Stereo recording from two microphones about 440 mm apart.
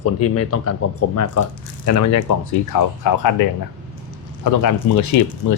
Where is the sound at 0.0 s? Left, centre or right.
Left.